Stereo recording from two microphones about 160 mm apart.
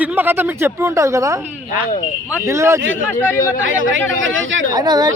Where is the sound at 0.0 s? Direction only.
10° right (ahead or behind).